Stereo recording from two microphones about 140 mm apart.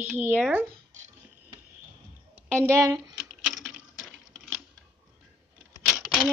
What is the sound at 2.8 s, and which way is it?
Speech, 25° right (ahead or behind).